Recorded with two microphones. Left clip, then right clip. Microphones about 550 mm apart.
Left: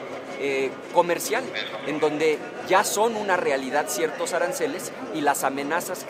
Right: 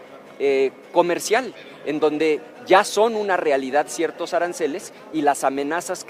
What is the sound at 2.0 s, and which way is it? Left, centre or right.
Speech, left.